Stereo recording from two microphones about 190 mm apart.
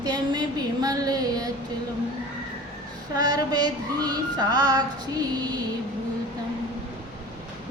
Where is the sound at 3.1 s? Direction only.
20° right (ahead or behind).